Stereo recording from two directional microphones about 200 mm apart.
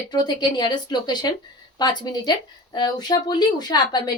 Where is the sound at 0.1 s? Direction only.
20° left (ahead or behind).